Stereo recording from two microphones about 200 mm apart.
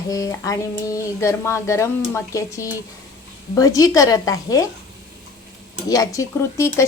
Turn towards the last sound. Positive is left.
turn(degrees=15)  # may be behind; listen again after turning